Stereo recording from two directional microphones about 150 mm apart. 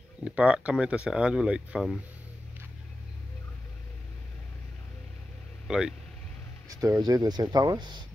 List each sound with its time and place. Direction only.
0.2 s speech: 5° right (ahead or behind)
5.7 s speech: 5° right (ahead or behind)
6.7 s speech: 25° right (ahead or behind)